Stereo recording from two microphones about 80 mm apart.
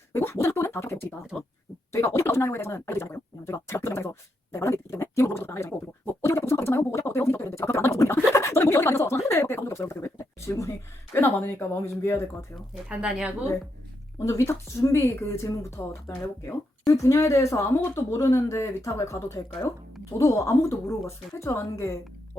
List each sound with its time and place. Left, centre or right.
0.1 s a sound: left
1.9 s speech: left
6.2 s a sound: left
11.1 s speech: left
12.9 s speech: centre
14.2 s speech: left